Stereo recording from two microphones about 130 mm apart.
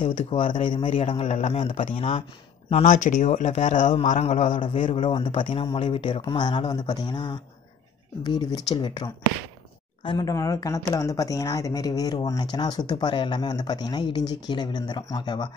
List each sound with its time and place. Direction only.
0.3 s speech: 40° left (ahead or behind); by 1.9 s 55° left (ahead or behind)
2.0 s speech: 45° left (ahead or behind)
2.7 s speech: 70° left (ahead or behind)
4.9 s speech: 45° left (ahead or behind)
6.2 s speech: 35° left (ahead or behind)